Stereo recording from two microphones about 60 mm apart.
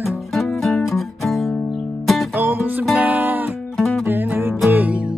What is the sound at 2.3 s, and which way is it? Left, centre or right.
Music, right.